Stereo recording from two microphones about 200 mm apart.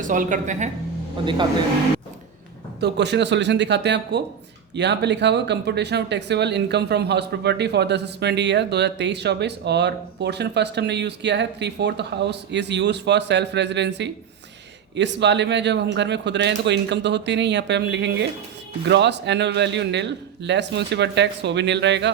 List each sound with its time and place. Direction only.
0.0 s speech: 40° right (ahead or behind)
1.2 s speech: 25° right (ahead or behind)
2.8 s speech: 60° right (ahead or behind)